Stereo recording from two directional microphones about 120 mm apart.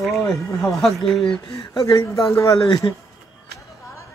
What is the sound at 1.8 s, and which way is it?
Speech, 30° left (ahead or behind).